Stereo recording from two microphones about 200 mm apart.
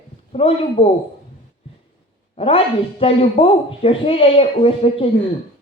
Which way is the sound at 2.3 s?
30° left (ahead or behind).